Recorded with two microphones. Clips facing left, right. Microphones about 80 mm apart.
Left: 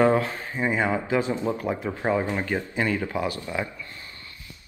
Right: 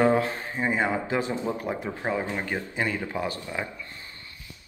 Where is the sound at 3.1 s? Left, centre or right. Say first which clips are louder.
Left 2 dB; right.